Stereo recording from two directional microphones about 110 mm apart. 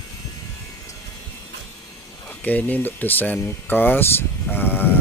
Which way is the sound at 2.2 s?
15° left (ahead or behind).